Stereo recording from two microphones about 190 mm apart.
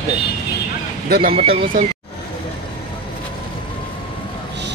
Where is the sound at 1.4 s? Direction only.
30° right (ahead or behind).